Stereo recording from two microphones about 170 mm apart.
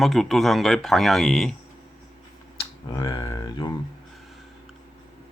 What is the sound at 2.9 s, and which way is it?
Speech, 20° left (ahead or behind).